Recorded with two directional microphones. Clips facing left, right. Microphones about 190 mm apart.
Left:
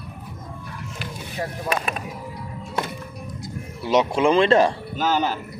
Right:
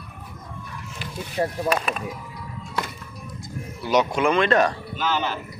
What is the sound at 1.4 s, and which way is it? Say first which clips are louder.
Speech: right 5 dB; 30° right (ahead or behind).